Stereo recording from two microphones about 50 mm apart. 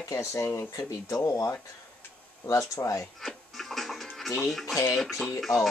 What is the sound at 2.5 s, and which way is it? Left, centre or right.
Speech, left.